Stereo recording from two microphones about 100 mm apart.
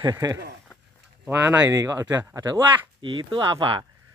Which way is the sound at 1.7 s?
30° right (ahead or behind).